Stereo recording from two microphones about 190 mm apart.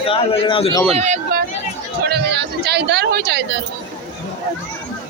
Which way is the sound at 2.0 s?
60° right (ahead or behind).